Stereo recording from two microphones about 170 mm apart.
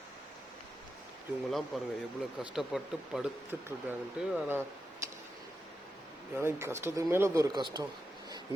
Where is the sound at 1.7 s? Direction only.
Centre (ahead or behind).